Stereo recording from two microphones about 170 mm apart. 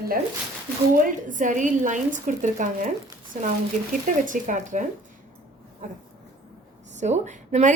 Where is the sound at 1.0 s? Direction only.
50° right (ahead or behind).